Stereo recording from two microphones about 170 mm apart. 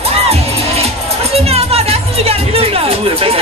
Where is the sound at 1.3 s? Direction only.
35° right (ahead or behind).